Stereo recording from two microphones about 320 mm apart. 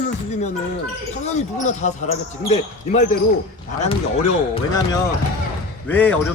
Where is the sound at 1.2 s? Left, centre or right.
Left.